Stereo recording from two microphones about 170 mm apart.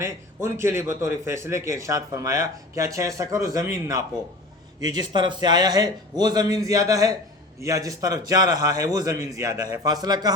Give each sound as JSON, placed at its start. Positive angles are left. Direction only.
{"t": 0.0, "sound": "a man's voice", "side_deg": -15}